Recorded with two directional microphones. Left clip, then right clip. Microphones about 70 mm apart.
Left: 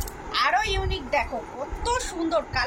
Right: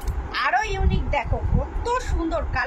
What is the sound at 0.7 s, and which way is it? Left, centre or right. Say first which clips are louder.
Speech: even; right.